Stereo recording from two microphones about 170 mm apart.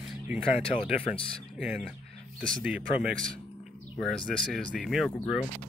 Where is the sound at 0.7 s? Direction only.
30° left (ahead or behind).